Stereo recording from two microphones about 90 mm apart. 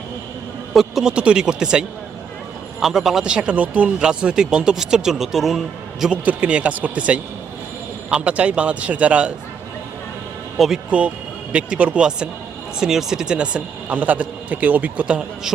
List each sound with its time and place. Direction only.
0.7 s speech: 5° right (ahead or behind)
2.8 s speech: 5° right (ahead or behind)
6.2 s speech: 15° right (ahead or behind)
10.8 s speech: 15° right (ahead or behind)